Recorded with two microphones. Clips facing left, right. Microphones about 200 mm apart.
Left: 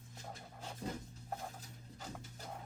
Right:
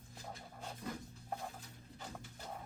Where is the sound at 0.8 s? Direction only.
35° left (ahead or behind).